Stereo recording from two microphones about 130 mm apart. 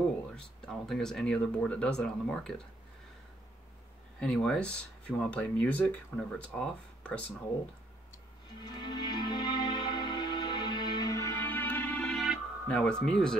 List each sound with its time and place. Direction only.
0.7 s speech: 5° left (ahead or behind)
4.2 s speech: 5° left (ahead or behind)
8.6 s music: 35° left (ahead or behind); by 12.2 s 10° left (ahead or behind)
12.6 s speech: 5° left (ahead or behind)